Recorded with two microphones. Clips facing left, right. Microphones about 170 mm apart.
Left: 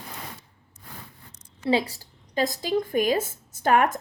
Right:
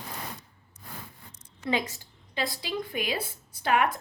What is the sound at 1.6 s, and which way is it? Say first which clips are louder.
A woman's voice: left 6 dB; 35° left (ahead or behind).